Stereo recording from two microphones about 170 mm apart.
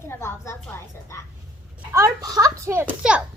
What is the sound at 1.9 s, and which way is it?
A child's voice, 20° right (ahead or behind).